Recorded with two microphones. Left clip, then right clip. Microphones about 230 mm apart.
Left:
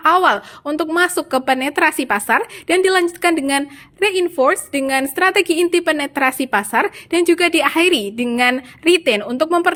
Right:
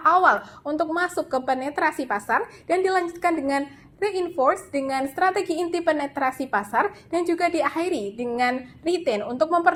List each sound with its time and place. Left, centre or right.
0.0 s a woman's voice: left